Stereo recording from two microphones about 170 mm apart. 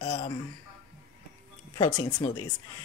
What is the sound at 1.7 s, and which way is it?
Speech, 25° left (ahead or behind).